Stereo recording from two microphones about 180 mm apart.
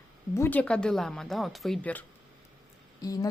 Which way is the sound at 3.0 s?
20° left (ahead or behind).